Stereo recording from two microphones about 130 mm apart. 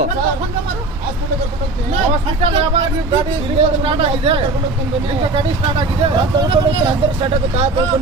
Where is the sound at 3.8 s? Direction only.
45° right (ahead or behind).